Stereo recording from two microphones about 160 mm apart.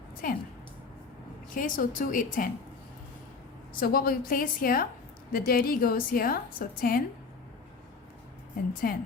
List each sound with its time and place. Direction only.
0.2 s a woman's voice: 65° left (ahead or behind)
1.5 s a woman's voice: 60° left (ahead or behind)
3.8 s a woman's voice: 65° left (ahead or behind)
8.8 s a woman's voice: 70° left (ahead or behind)